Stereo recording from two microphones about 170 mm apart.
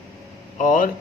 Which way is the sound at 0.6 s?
50° left (ahead or behind).